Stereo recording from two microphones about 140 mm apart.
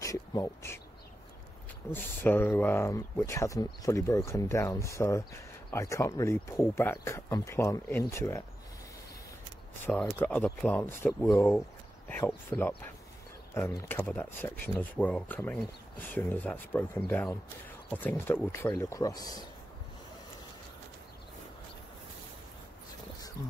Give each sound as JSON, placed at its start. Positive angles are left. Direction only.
{"t": 0.0, "sound": "speech", "side_deg": 25}
{"t": 1.9, "sound": "speech", "side_deg": 15}
{"t": 9.8, "sound": "speech", "side_deg": 15}